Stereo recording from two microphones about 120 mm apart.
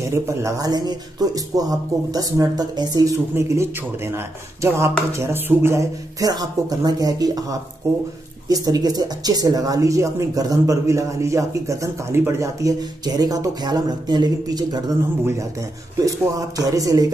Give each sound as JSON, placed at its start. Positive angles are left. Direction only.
{"t": 0.1, "sound": "speech", "side_deg": -25}
{"t": 4.6, "sound": "speech", "side_deg": -25}
{"t": 8.5, "sound": "speech", "side_deg": -30}
{"t": 16.1, "sound": "speech", "side_deg": -30}